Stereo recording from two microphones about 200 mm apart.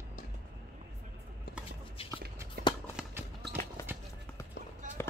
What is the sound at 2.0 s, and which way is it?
Walk, 30° left (ahead or behind).